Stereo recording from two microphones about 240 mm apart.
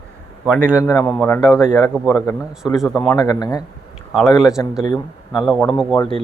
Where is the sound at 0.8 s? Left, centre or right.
Centre.